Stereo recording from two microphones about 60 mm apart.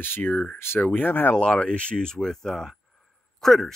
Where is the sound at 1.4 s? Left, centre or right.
Centre.